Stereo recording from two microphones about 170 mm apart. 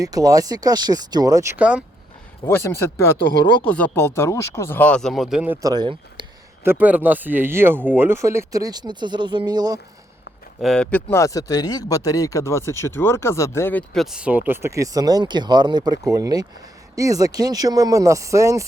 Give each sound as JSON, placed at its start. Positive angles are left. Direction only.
{"t": 0.0, "sound": "speech", "side_deg": -20}
{"t": 2.4, "sound": "speech", "side_deg": 15}
{"t": 5.6, "sound": "speech", "side_deg": -25}
{"t": 6.7, "sound": "speech", "side_deg": -10}
{"t": 10.6, "sound": "speech", "side_deg": 5}
{"t": 11.1, "sound": "speech", "side_deg": 20}